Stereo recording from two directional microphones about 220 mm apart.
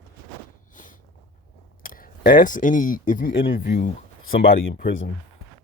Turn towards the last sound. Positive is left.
turn(degrees=60)  # may be behind; listen again after turning